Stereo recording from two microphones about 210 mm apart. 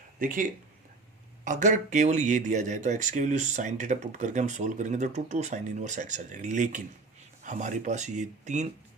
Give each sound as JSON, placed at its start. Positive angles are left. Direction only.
{"t": 0.2, "sound": "speech", "side_deg": -40}
{"t": 1.5, "sound": "speech", "side_deg": -35}